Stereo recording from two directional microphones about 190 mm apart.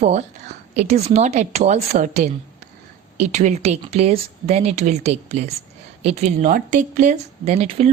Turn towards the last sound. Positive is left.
turn(degrees=-35)  # may be behind; listen again after turning